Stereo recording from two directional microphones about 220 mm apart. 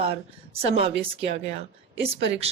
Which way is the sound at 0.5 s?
25° right (ahead or behind).